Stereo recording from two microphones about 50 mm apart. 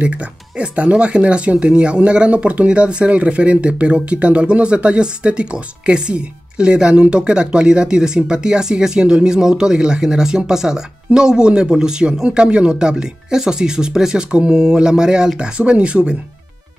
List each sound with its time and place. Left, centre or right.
0.0 s speech: right